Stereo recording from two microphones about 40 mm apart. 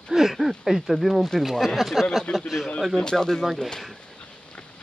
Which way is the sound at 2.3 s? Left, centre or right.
Left.